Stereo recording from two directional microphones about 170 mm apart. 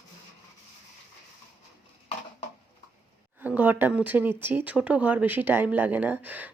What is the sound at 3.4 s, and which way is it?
Speech, 10° right (ahead or behind).